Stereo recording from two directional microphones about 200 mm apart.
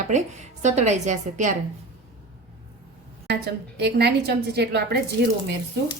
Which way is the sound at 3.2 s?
55° right (ahead or behind).